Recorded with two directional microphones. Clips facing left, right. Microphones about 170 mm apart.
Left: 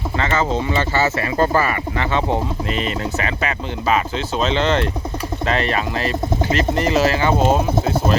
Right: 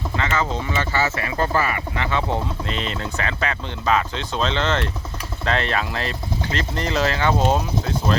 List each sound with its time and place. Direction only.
0.2 s speech: 35° left (ahead or behind)
2.3 s speech: 5° left (ahead or behind)